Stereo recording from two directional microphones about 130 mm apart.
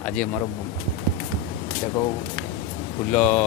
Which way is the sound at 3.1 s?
15° left (ahead or behind).